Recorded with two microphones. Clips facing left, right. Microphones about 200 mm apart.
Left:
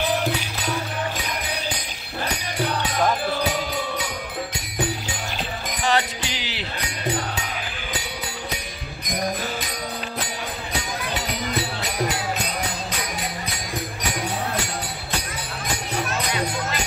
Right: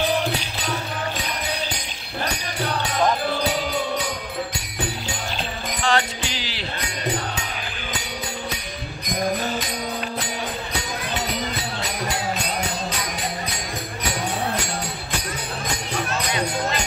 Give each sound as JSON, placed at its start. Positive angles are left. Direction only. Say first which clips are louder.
{"t": 5.9, "sound": "music", "louder": "even", "side_deg": 15}